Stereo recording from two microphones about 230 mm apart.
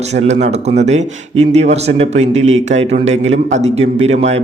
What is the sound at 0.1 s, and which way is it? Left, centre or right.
A man's voice, right.